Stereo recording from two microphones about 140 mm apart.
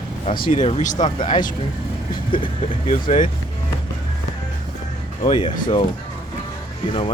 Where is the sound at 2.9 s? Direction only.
70° left (ahead or behind).